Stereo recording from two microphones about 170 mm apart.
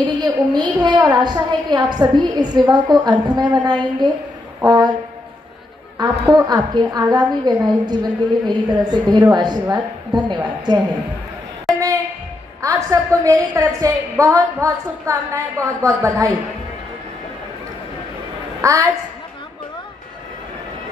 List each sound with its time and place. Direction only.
0.2 s a woman's voice: 25° right (ahead or behind)
5.9 s a woman's voice: 20° right (ahead or behind)
12.6 s a woman's voice: 20° right (ahead or behind)
18.6 s a woman's voice: 20° right (ahead or behind)